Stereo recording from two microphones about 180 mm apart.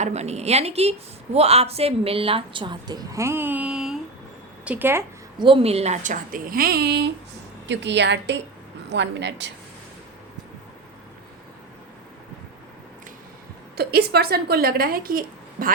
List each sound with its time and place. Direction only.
0.0 s a woman's voice: 35° right (ahead or behind); by 5.0 s 10° right (ahead or behind)
5.4 s speech: 30° right (ahead or behind); by 7.1 s 65° right (ahead or behind)
7.7 s a woman's voice: 80° right
13.7 s a woman's voice: 65° right (ahead or behind)